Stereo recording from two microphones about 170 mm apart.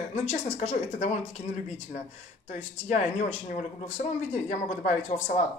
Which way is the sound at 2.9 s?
45° left (ahead or behind).